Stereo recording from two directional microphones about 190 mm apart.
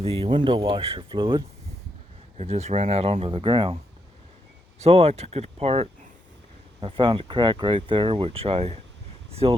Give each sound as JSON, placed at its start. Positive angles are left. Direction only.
{"t": 0.0, "sound": "speech", "side_deg": -30}
{"t": 2.4, "sound": "speech", "side_deg": -35}
{"t": 4.8, "sound": "speech", "side_deg": -30}